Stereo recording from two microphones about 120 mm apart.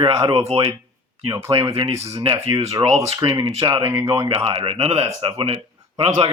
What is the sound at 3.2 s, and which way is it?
Speech, 35° right (ahead or behind).